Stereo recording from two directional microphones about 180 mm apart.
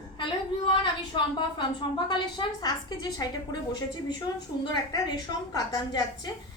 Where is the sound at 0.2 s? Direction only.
30° left (ahead or behind).